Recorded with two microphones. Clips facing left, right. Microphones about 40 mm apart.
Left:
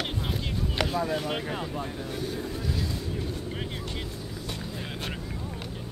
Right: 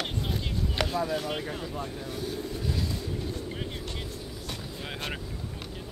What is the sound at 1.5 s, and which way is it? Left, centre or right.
Speech, left.